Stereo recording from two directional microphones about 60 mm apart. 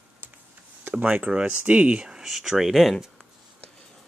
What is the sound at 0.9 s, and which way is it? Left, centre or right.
Speech, right.